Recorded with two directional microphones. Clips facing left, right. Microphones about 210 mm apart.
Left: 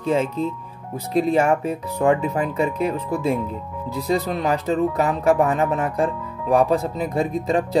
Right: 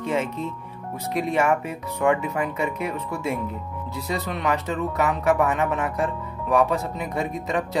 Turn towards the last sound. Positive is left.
turn(degrees=30)  # may be behind; listen again after turning